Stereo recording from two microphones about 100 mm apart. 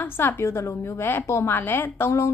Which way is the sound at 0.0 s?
20° left (ahead or behind).